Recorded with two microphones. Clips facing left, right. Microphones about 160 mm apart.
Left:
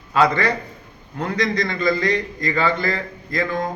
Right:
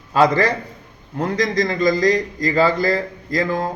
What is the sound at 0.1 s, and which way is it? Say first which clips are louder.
A man's voice: right 2 dB; 35° right (ahead or behind).